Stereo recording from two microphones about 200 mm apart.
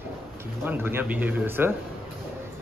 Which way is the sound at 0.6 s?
10° right (ahead or behind).